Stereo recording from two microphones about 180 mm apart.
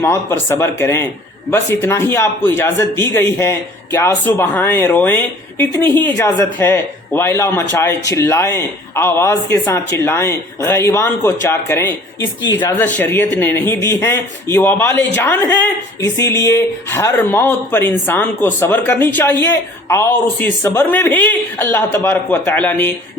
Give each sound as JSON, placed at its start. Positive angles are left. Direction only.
{"t": 0.0, "sound": "speech", "side_deg": 15}